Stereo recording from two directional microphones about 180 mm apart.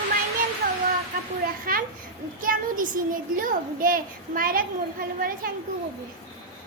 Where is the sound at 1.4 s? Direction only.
55° right (ahead or behind).